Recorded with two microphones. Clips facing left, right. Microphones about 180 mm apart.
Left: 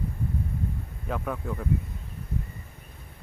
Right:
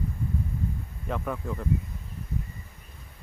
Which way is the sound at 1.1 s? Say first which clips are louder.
Even; centre (ahead or behind).